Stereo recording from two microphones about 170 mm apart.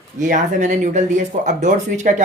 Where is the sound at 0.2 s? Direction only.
50° right (ahead or behind).